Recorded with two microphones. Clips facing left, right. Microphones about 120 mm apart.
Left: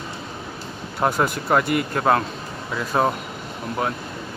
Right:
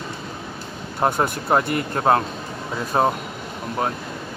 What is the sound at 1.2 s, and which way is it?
Speech, 25° right (ahead or behind).